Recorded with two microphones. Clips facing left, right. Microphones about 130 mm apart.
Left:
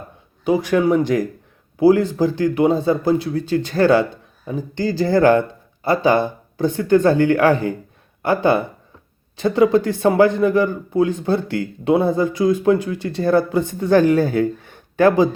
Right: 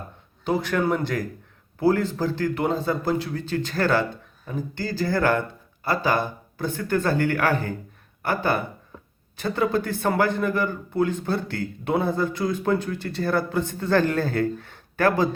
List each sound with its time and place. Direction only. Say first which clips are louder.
0.4 s a man's voice: left 7 dB; 15° left (ahead or behind)